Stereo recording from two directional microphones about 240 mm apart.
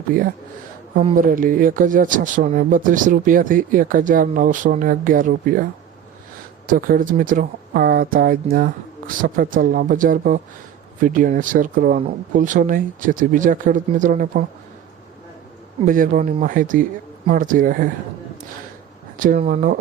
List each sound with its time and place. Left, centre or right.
0.1 s speech: right
6.7 s speech: right
15.9 s speech: right
19.1 s speech: right